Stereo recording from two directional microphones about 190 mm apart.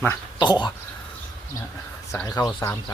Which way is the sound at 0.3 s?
25° left (ahead or behind).